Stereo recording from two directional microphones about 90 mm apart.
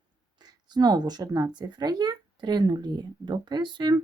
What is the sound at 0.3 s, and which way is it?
A woman's voice, 50° right (ahead or behind).